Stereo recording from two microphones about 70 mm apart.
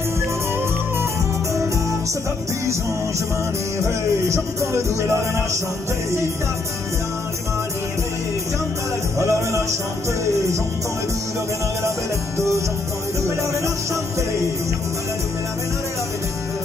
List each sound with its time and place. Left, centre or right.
3.8 s music: right
9.2 s music: right
12.4 s music: right